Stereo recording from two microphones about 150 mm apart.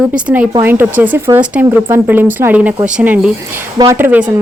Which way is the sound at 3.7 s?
25° right (ahead or behind).